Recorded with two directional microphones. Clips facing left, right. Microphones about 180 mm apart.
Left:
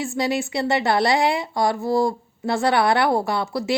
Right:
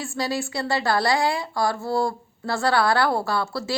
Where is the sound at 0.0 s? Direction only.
20° left (ahead or behind).